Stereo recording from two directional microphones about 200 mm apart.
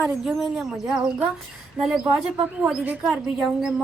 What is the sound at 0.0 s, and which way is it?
Speech, centre (ahead or behind).